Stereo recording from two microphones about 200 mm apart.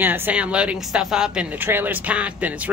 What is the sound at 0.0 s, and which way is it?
A woman's voice, 10° right (ahead or behind).